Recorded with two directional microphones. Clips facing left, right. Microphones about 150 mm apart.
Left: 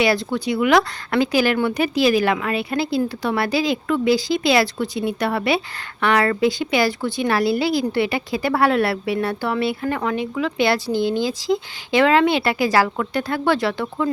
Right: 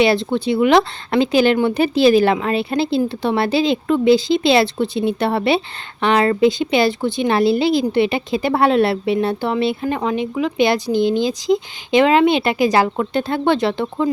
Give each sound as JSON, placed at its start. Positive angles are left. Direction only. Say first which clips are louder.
{"t": 0.0, "sound": "speech", "louder": "right 4 dB", "side_deg": -25}